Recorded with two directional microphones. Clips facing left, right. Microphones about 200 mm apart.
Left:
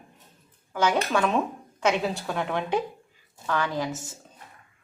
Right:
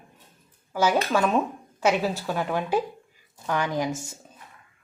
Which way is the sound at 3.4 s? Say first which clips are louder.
Right 1 dB; 15° right (ahead or behind).